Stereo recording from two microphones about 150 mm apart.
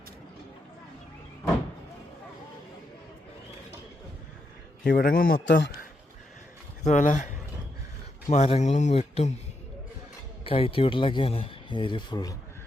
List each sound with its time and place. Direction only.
4.8 s a man's voice: 75° left (ahead or behind)
6.8 s speech: 55° left (ahead or behind)
8.3 s speech: 45° left (ahead or behind)
10.4 s speech: 35° left (ahead or behind)